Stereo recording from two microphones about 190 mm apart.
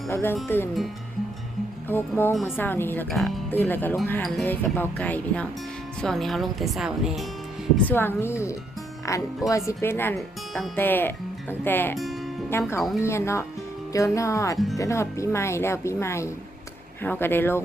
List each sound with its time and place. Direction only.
0.1 s speech: 10° left (ahead or behind)
1.9 s speech: 10° left (ahead or behind)
7.9 s speech: 10° left (ahead or behind)
11.9 s music: centre (ahead or behind)
12.5 s speech: 10° left (ahead or behind)